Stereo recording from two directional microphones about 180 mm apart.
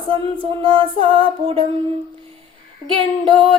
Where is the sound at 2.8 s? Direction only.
30° right (ahead or behind).